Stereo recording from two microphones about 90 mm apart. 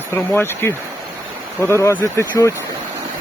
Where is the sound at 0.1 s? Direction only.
25° left (ahead or behind).